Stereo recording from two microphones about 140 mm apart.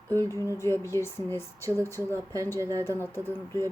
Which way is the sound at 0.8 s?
20° left (ahead or behind).